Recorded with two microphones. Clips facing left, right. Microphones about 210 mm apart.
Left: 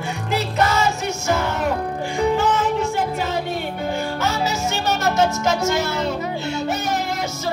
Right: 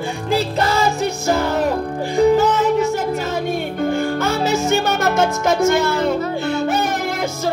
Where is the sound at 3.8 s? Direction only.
50° right (ahead or behind).